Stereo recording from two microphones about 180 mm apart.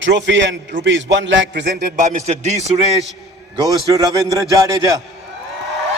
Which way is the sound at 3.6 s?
20° right (ahead or behind).